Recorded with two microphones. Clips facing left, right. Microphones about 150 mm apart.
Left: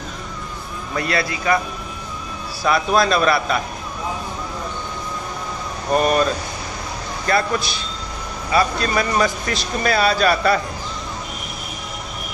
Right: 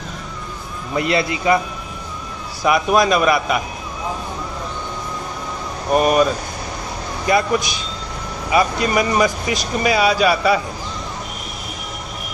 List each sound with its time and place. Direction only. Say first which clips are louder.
0.9 s speech: right 3 dB; 20° right (ahead or behind)
2.6 s speech: right 2 dB; 15° right (ahead or behind)
5.9 s speech: right 2 dB; 10° right (ahead or behind)
7.2 s speech: right 3 dB; 15° right (ahead or behind)